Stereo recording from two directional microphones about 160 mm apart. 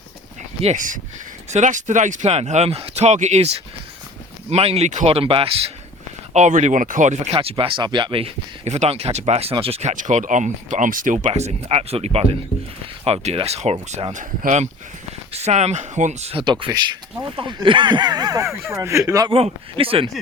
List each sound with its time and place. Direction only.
0.6 s speech: 50° right (ahead or behind)
7.3 s speech: 35° right (ahead or behind)
9.9 s speech: 50° right (ahead or behind); by 19.3 s 20° right (ahead or behind)
19.3 s speech: 35° right (ahead or behind)